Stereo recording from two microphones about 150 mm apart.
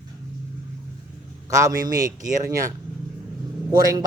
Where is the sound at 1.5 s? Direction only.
20° right (ahead or behind).